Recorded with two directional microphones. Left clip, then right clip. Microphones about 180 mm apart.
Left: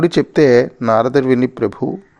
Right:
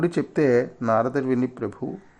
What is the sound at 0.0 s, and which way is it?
Speech, 30° left (ahead or behind).